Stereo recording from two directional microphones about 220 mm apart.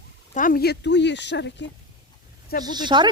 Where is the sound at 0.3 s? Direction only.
40° left (ahead or behind).